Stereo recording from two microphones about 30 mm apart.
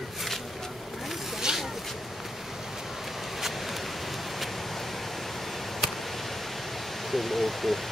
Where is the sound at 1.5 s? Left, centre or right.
Right.